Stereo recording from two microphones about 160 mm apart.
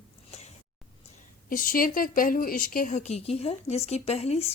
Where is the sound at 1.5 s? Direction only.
60° left (ahead or behind).